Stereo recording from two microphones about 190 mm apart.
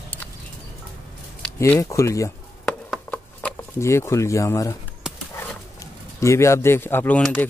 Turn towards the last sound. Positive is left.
turn(degrees=5)  # may be behind; listen again after turning